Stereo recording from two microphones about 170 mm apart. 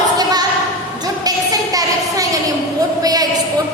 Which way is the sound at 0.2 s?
25° right (ahead or behind).